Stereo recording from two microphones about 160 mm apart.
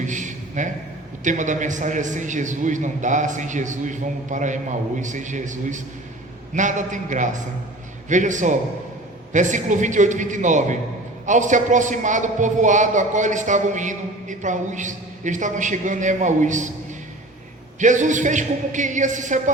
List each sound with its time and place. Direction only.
0.0 s a sound: 50° right (ahead or behind)
1.2 s a man's voice: 50° right (ahead or behind)
17.7 s a man's voice: 50° right (ahead or behind)